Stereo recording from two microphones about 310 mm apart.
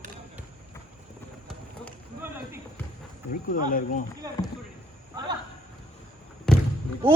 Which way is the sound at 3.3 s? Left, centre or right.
Left.